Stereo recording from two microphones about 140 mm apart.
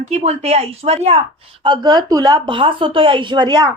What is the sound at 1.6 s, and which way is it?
A woman's voice, 30° right (ahead or behind).